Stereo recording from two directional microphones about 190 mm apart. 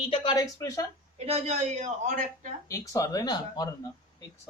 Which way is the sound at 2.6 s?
15° left (ahead or behind).